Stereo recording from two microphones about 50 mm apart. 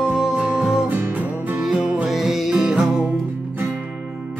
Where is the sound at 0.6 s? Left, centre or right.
Centre.